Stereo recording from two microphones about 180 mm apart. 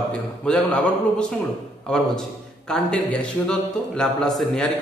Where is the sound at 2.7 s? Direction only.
5° left (ahead or behind).